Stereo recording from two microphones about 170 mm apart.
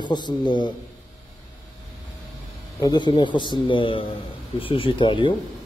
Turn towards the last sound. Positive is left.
turn(degrees=30)  # may be behind; listen again after turning